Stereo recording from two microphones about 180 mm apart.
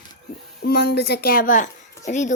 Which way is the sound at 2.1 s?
40° left (ahead or behind).